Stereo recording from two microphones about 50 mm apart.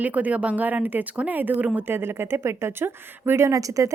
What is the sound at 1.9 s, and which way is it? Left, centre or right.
A woman's voice, right.